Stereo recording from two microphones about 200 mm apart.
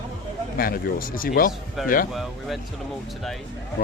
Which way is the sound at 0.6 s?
45° left (ahead or behind).